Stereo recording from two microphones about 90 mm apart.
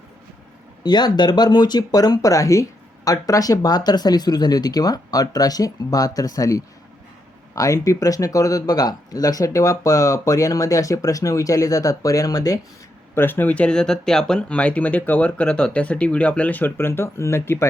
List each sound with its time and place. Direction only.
0.9 s speech: 50° left (ahead or behind)
13.1 s speech: 25° left (ahead or behind)